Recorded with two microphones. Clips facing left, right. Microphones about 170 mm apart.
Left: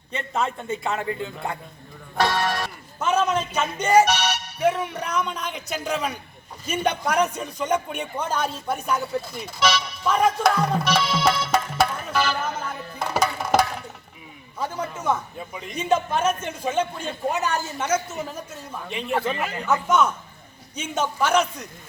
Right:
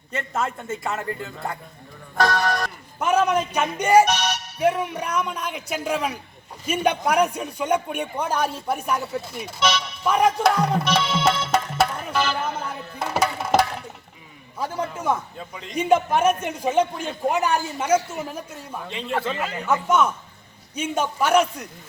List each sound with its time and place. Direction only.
0.3 s a man's voice: centre (ahead or behind)
0.9 s a man's voice: 15° left (ahead or behind)
2.3 s music: 5° left (ahead or behind)
3.0 s a man's voice: 15° right (ahead or behind)
4.0 s speech: 5° left (ahead or behind)
4.6 s a man's voice: 10° right (ahead or behind)
10.8 s music: centre (ahead or behind)
14.6 s a man's voice: 10° right (ahead or behind)
15.4 s a man's voice: 10° left (ahead or behind)
15.7 s a man's voice: 15° right (ahead or behind)
18.9 s a man's voice: 10° left (ahead or behind)
19.6 s a man's voice: 10° right (ahead or behind)